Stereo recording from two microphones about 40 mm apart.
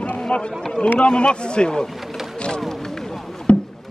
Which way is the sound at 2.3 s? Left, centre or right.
Left.